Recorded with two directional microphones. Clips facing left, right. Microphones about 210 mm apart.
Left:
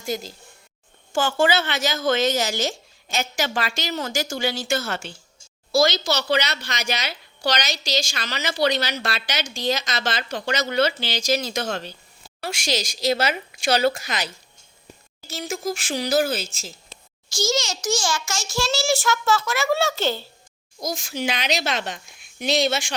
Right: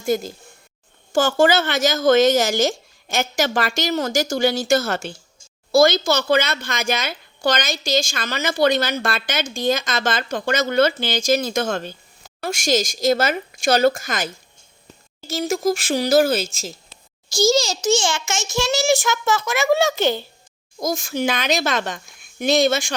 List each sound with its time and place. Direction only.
0.0 s a woman's voice: 50° right (ahead or behind)
15.4 s a child's voice: 40° right (ahead or behind); by 20.2 s 15° right (ahead or behind)
20.7 s a woman's voice: 50° right (ahead or behind)